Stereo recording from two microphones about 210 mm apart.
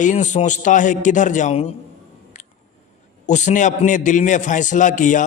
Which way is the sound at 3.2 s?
35° left (ahead or behind).